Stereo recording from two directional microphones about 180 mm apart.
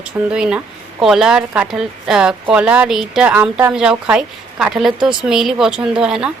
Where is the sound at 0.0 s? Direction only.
5° right (ahead or behind).